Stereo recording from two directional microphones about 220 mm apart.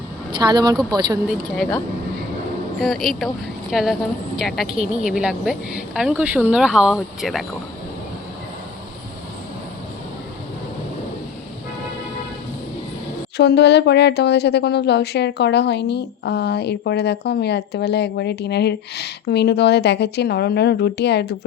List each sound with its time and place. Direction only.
0.3 s speech: 15° right (ahead or behind)
2.8 s a woman's voice: centre (ahead or behind)
13.3 s speech: 50° left (ahead or behind)